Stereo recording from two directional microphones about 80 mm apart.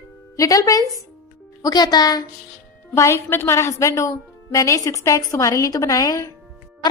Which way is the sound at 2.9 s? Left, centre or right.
Left.